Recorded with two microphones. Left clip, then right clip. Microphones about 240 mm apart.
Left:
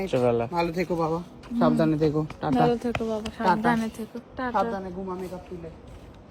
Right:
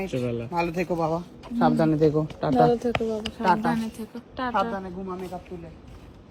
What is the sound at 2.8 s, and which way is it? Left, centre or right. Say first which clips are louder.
Speech: right 3 dB; left.